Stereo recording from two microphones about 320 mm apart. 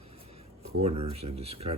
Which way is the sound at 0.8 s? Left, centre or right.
Centre.